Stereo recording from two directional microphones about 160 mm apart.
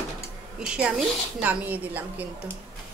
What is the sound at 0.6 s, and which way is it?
A woman's voice, 5° right (ahead or behind).